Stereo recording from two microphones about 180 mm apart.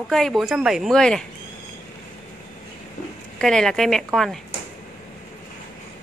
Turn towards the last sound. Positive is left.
turn(degrees=0)  # may be behind; listen again after turning